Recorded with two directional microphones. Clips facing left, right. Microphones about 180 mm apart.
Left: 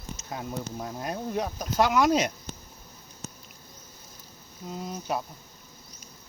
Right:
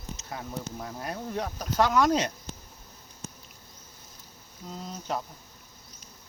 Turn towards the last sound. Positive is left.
turn(degrees=10)  # may be behind; listen again after turning